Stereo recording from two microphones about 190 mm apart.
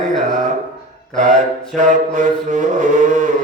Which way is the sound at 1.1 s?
40° right (ahead or behind).